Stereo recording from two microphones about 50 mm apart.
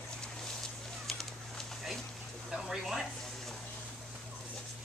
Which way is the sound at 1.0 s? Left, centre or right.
Centre.